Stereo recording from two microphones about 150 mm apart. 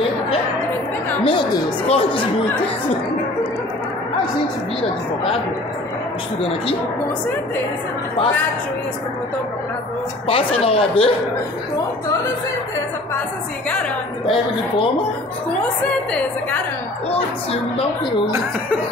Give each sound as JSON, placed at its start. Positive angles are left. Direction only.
{"t": 1.2, "sound": "speech", "side_deg": 30}
{"t": 10.2, "sound": "speech", "side_deg": 40}
{"t": 14.2, "sound": "speech", "side_deg": 35}
{"t": 17.1, "sound": "speech", "side_deg": 40}